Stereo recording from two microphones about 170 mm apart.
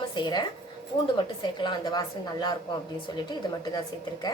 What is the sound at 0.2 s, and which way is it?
A woman's voice, 25° left (ahead or behind).